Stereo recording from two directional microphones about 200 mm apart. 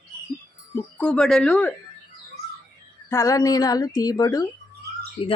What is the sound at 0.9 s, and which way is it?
Speech, 5° left (ahead or behind).